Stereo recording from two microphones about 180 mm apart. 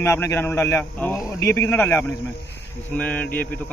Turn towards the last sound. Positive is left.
turn(degrees=10)  # may be behind; listen again after turning